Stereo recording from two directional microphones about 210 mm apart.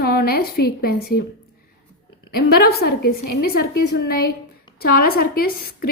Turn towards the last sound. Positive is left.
turn(degrees=45)  # may be behind; listen again after turning